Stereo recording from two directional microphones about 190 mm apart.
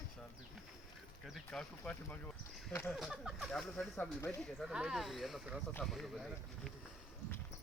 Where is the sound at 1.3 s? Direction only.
5° left (ahead or behind).